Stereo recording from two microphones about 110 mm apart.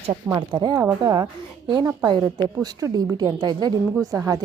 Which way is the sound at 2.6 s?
30° right (ahead or behind).